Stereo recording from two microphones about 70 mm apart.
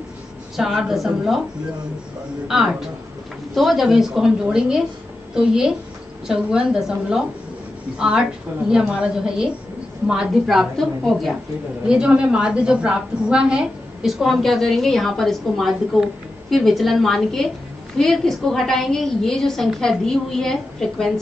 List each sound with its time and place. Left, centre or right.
0.6 s a woman's voice: centre
2.4 s a woman's voice: centre
11.9 s a woman's voice: centre